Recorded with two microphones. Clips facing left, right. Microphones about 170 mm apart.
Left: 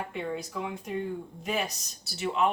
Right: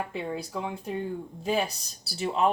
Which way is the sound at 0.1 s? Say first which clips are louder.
Right 1 dB; 30° right (ahead or behind).